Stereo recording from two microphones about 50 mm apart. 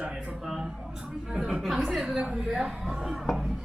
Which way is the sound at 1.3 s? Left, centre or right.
Centre.